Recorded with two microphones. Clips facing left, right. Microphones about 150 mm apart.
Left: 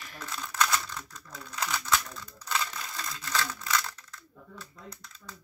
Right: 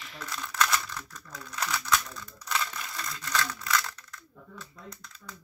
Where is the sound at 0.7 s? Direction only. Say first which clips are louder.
Even; 25° left (ahead or behind).